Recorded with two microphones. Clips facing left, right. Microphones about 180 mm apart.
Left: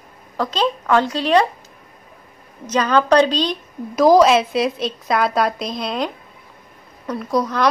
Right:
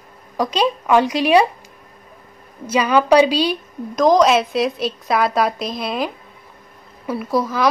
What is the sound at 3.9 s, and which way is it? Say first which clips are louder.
A woman's voice: left 2 dB; 5° left (ahead or behind).